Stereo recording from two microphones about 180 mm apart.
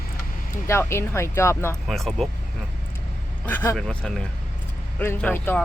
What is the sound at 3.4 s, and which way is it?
Speech, 10° left (ahead or behind).